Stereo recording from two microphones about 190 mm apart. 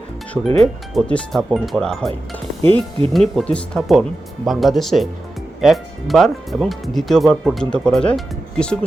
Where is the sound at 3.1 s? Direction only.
Centre (ahead or behind).